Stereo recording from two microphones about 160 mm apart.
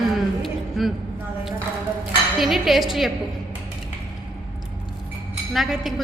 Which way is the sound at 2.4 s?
Centre (ahead or behind).